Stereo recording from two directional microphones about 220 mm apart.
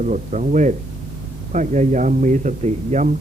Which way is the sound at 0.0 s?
35° right (ahead or behind).